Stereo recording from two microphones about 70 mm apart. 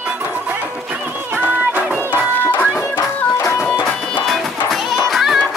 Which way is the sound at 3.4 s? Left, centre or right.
Left.